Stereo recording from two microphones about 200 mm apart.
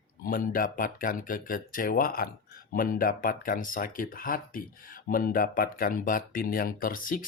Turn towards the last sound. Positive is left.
turn(degrees=45)  # may be behind; listen again after turning